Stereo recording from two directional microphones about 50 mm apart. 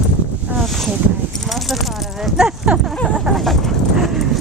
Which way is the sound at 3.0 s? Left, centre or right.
Centre.